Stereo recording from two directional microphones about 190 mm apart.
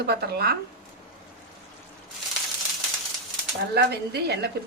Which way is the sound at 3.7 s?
60° right (ahead or behind).